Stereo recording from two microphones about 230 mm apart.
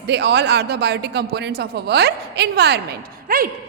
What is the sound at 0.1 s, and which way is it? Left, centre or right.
A woman's voice, right.